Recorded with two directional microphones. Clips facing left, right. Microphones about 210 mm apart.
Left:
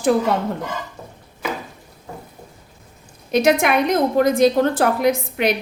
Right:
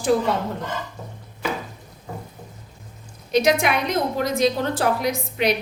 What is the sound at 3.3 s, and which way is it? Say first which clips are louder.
A woman's voice: left 3 dB; 55° left (ahead or behind).